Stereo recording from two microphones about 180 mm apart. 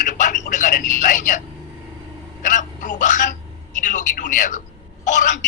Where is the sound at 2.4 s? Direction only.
45° left (ahead or behind).